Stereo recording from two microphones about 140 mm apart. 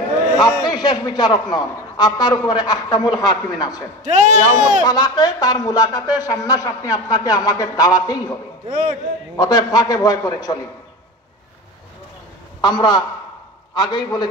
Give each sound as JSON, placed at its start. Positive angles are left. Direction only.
{"t": 0.4, "sound": "speech", "side_deg": 30}
{"t": 4.0, "sound": "speech", "side_deg": -60}
{"t": 4.8, "sound": "speech", "side_deg": 30}
{"t": 9.4, "sound": "speech", "side_deg": 25}
{"t": 12.6, "sound": "a man's voice", "side_deg": 30}